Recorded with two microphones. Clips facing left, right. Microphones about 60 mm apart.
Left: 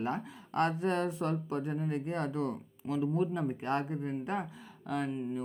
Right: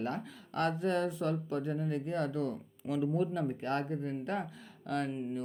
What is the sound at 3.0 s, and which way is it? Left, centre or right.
Speech, centre.